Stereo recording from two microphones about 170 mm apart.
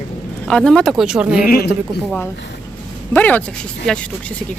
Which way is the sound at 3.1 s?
10° left (ahead or behind).